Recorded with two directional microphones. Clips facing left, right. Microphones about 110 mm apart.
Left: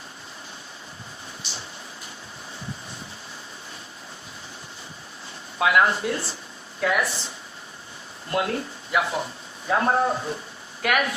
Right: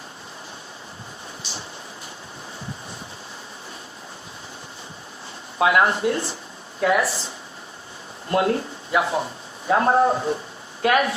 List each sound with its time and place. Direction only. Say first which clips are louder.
5.5 s speech: right 2 dB; 25° right (ahead or behind)